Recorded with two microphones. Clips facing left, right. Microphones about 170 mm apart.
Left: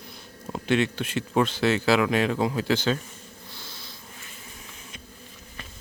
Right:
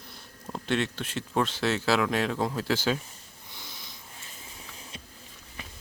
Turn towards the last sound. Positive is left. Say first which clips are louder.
# left 3 dB
turn(degrees=-15)  # may be behind; listen again after turning